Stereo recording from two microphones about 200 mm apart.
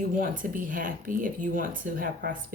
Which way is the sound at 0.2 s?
45° right (ahead or behind).